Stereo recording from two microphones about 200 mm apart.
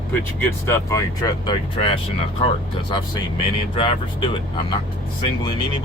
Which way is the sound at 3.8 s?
25° left (ahead or behind).